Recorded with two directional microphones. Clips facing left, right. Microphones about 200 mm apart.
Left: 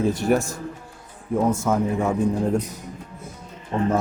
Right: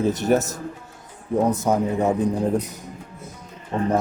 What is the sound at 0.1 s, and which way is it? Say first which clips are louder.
Speech: right 1 dB; 20° right (ahead or behind).